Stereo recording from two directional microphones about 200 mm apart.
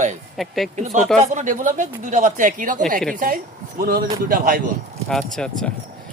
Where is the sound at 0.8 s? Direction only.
35° right (ahead or behind).